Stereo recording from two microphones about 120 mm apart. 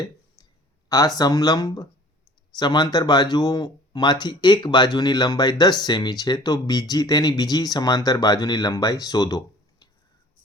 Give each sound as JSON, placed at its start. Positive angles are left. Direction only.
{"t": 0.9, "sound": "speech", "side_deg": 30}